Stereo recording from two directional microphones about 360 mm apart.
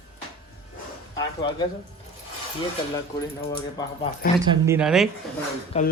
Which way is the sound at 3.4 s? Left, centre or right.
Centre.